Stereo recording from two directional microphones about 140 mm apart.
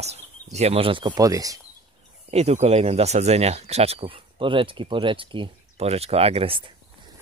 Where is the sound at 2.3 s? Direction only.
50° right (ahead or behind).